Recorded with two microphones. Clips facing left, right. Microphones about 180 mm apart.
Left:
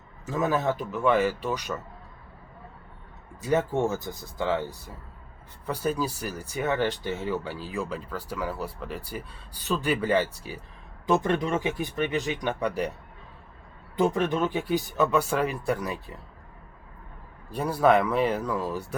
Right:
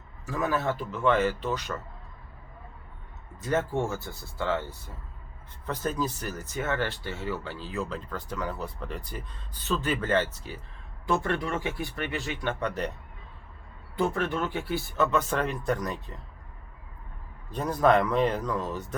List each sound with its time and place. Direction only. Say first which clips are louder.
0.3 s speech: left 3 dB; 20° left (ahead or behind)
3.4 s speech: left 3 dB; 15° left (ahead or behind)
13.9 s speech: left 3 dB; 20° left (ahead or behind)
17.5 s speech: left 1 dB; 10° left (ahead or behind)